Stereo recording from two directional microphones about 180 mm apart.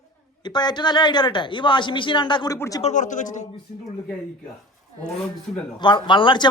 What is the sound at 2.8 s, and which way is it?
Speech, 40° left (ahead or behind).